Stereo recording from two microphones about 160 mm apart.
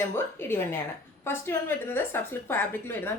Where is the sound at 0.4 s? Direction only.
15° left (ahead or behind).